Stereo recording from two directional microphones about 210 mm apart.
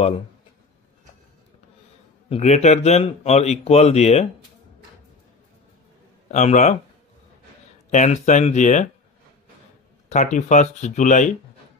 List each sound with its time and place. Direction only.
2.2 s speech: 30° left (ahead or behind)
6.3 s speech: 35° left (ahead or behind)
7.9 s speech: 35° left (ahead or behind)
10.0 s speech: 35° left (ahead or behind)